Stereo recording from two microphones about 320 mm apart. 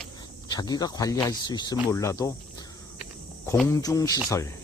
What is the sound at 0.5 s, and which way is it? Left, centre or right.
Speech, centre.